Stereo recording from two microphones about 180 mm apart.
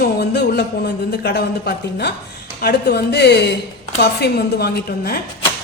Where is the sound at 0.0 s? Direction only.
65° left (ahead or behind).